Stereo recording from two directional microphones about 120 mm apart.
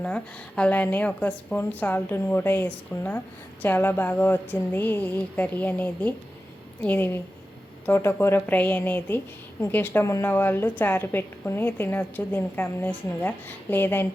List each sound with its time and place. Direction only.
0.0 s a woman's voice: 10° left (ahead or behind)